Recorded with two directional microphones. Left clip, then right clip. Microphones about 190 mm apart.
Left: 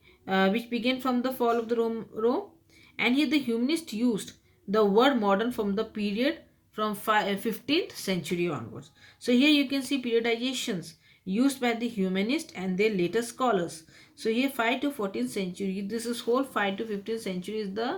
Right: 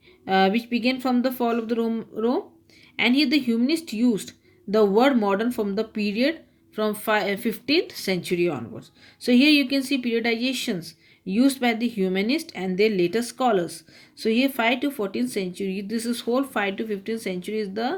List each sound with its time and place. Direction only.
0.3 s a woman's voice: 40° right (ahead or behind)